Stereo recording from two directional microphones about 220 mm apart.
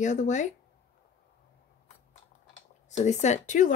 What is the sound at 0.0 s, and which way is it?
Speech, 35° left (ahead or behind).